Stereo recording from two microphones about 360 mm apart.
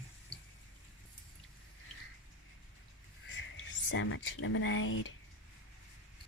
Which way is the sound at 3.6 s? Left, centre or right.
Left.